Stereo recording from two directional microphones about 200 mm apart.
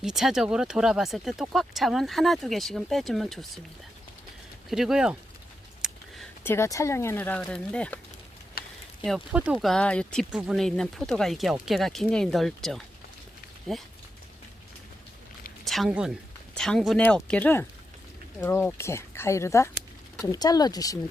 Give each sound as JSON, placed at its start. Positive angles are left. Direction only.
{"t": 0.0, "sound": "speech", "side_deg": 0}
{"t": 4.7, "sound": "speech", "side_deg": 0}
{"t": 5.8, "sound": "a sound", "side_deg": -5}
{"t": 6.4, "sound": "speech", "side_deg": 10}
{"t": 8.6, "sound": "a sound", "side_deg": 50}
{"t": 9.0, "sound": "speech", "side_deg": -5}
{"t": 15.6, "sound": "a woman's voice", "side_deg": 0}